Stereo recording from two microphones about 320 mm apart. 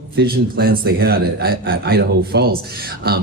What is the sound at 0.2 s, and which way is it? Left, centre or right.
Speech, right.